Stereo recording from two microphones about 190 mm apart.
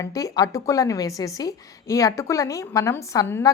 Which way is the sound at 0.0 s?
20° left (ahead or behind).